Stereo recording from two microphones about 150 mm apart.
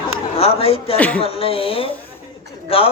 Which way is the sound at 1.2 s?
40° left (ahead or behind).